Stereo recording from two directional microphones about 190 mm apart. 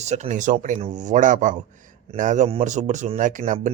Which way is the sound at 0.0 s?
40° right (ahead or behind).